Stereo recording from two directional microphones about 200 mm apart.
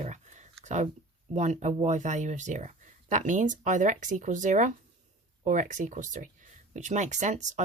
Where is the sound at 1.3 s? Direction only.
35° right (ahead or behind).